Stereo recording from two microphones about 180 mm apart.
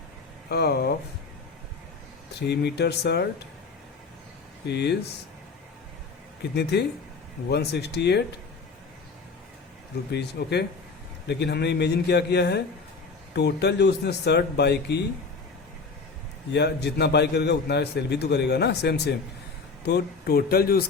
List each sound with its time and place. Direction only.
0.4 s speech: 60° left (ahead or behind)
2.5 s a man's voice: 70° left (ahead or behind)
4.6 s a man's voice: 70° left (ahead or behind)
6.6 s a man's voice: 65° left (ahead or behind)
10.1 s a man's voice: 65° left (ahead or behind)
16.5 s a man's voice: 70° left (ahead or behind)